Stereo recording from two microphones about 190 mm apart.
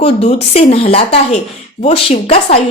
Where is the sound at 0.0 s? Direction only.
30° left (ahead or behind).